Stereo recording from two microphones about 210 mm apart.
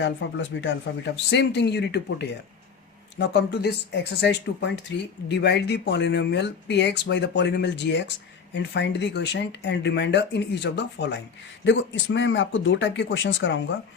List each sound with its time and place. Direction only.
0.0 s speech: 60° left (ahead or behind)